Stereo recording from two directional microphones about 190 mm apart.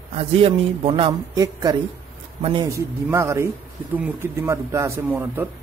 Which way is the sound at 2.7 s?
15° right (ahead or behind).